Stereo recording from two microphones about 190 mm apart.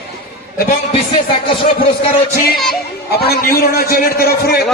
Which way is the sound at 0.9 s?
30° left (ahead or behind).